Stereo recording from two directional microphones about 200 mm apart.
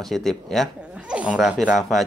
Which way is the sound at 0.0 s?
Centre (ahead or behind).